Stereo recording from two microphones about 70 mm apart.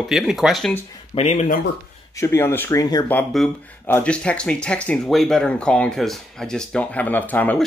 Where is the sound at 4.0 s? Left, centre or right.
Centre.